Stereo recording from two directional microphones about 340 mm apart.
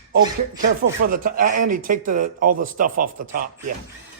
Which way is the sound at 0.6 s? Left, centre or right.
Right.